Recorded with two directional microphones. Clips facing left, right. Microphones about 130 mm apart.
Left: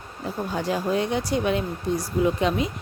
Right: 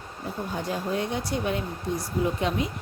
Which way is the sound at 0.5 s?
90° left.